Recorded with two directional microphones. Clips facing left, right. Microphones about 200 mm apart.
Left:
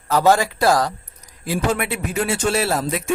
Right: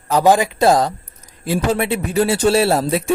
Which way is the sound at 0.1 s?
15° right (ahead or behind).